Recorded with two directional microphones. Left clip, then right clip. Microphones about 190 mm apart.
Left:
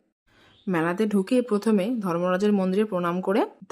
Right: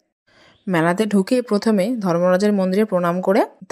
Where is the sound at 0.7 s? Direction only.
30° right (ahead or behind).